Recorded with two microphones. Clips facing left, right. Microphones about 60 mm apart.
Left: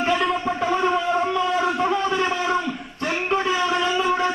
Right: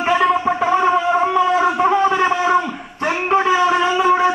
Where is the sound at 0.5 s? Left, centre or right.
Right.